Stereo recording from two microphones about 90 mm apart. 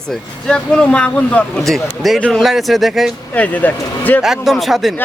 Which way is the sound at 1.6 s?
Centre (ahead or behind).